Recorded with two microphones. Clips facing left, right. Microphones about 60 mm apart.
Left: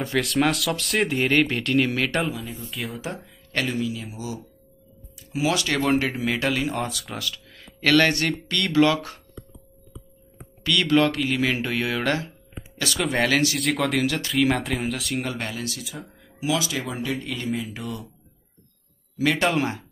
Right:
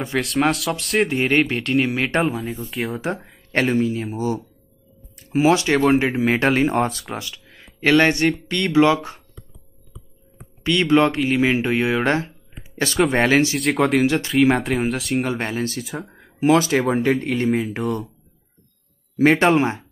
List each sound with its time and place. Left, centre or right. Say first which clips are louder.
0.2 s speech: right 3 dB; centre
1.2 s speech: even; centre
1.5 s speech: right 2 dB; centre
1.8 s speech: right 3 dB; right
2.2 s speech: right 6 dB; centre
3.5 s speech: right 7 dB; right
5.3 s speech: right 7 dB; right
7.2 s speech: even; right
10.6 s speech: right 4 dB; right
13.6 s speech: right 5 dB; centre
14.0 s speech: right 6 dB; right
14.6 s speech: right 5 dB; centre
15.3 s speech: right 6 dB; right
19.1 s speech: right 7 dB; right